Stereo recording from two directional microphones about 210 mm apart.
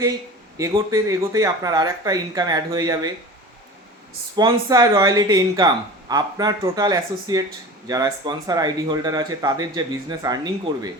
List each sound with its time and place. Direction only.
0.5 s speech: 15° right (ahead or behind)
4.4 s speech: 20° right (ahead or behind)